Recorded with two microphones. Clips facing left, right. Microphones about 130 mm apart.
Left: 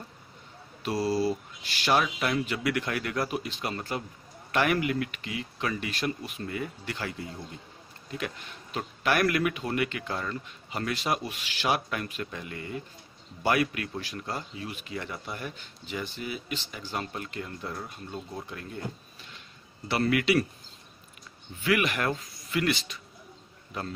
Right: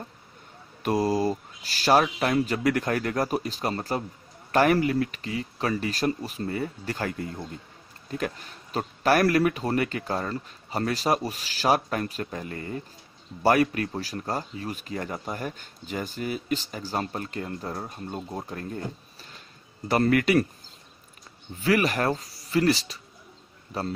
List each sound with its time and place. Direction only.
0.8 s speech: 45° right (ahead or behind)
8.2 s speech: 40° right (ahead or behind)
19.9 s speech: 45° right (ahead or behind)
21.5 s speech: 35° right (ahead or behind)